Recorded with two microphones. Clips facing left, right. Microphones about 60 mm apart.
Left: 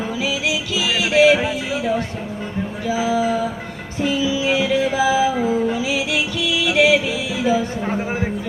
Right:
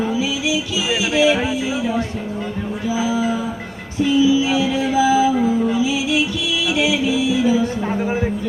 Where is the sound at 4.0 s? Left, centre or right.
Left.